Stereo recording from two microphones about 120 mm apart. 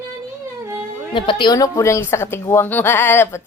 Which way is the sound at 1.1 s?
45° left (ahead or behind).